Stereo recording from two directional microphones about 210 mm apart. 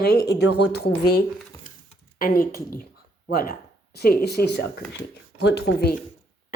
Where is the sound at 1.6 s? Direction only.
40° left (ahead or behind).